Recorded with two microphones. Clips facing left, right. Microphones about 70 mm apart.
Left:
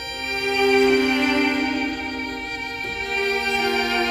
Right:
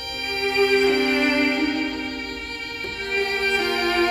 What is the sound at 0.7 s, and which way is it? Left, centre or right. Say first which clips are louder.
Music: left 2 dB; centre.